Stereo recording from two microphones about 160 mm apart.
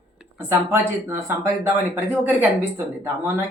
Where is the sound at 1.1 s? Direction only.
15° right (ahead or behind).